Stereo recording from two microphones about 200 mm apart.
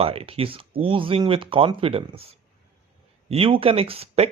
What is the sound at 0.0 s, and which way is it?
Speech, 30° right (ahead or behind).